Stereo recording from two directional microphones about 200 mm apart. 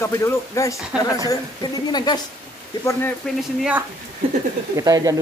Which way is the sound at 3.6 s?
5° right (ahead or behind).